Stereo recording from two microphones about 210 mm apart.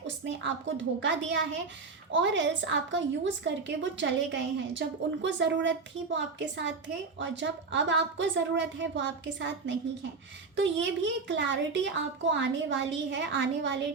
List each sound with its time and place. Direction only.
0.3 s a woman's voice: 60° right (ahead or behind)